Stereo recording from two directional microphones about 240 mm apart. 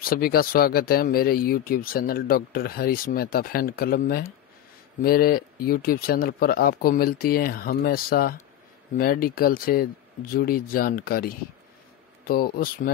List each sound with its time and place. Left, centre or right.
0.0 s speech: left